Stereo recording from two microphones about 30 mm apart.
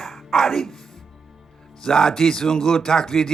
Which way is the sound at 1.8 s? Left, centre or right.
Centre.